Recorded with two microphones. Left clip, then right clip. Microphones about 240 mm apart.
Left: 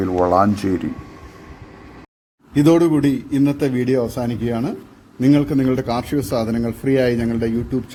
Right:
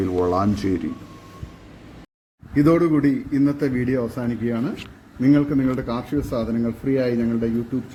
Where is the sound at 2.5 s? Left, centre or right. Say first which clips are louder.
Left 3 dB; left.